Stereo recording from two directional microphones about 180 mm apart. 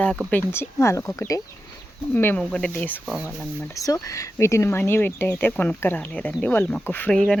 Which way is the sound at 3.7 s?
20° left (ahead or behind).